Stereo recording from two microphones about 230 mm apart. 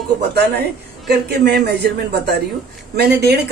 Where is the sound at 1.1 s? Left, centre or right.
Right.